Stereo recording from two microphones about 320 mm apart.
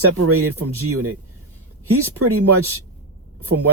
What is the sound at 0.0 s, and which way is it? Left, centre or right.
Speech, right.